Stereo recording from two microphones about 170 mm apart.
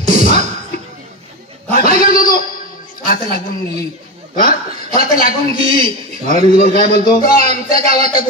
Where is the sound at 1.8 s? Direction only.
60° left (ahead or behind).